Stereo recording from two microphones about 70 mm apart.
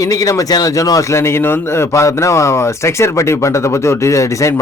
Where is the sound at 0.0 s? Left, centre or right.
Left.